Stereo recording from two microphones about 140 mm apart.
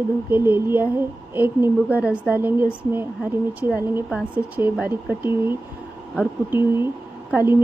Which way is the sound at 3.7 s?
5° right (ahead or behind).